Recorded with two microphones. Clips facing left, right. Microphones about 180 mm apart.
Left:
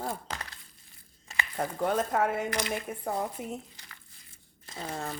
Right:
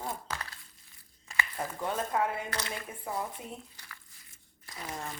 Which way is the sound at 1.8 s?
60° left (ahead or behind).